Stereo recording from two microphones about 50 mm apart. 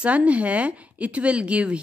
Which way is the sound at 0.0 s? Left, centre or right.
Right.